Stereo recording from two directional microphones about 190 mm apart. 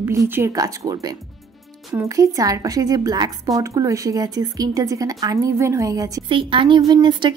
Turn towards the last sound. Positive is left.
turn(degrees=-25)  # may be behind; listen again after turning